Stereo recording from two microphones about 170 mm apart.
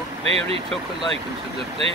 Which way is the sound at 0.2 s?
35° right (ahead or behind).